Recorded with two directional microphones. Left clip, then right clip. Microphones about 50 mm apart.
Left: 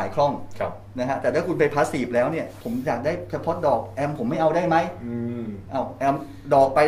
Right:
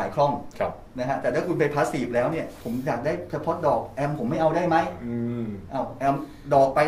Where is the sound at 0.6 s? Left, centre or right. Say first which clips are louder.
Even; centre.